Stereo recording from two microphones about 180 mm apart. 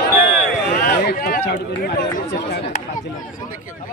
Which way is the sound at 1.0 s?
55° left (ahead or behind).